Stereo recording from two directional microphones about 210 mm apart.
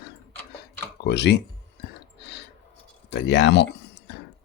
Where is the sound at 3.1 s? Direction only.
55° left (ahead or behind).